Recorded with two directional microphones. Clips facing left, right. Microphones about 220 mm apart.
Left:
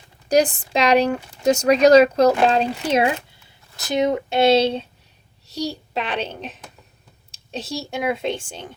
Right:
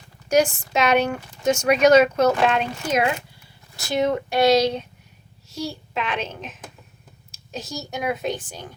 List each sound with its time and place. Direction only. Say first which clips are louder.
0.3 s speech: left 1 dB; 35° left (ahead or behind)
3.8 s speech: left 2 dB; 20° left (ahead or behind)